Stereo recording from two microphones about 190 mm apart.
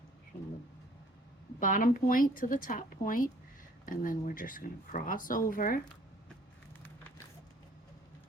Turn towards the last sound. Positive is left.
turn(degrees=10)  # may be behind; listen again after turning